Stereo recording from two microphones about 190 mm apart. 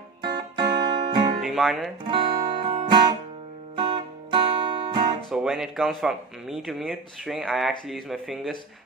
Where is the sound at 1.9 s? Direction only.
25° right (ahead or behind).